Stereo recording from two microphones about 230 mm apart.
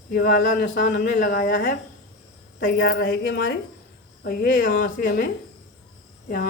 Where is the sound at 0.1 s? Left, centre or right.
Left.